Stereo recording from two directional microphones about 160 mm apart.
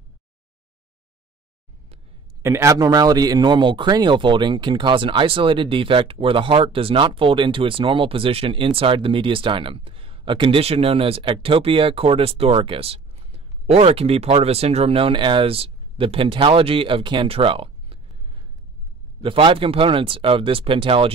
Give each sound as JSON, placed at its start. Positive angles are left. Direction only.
{"t": 2.4, "sound": "speech", "side_deg": -20}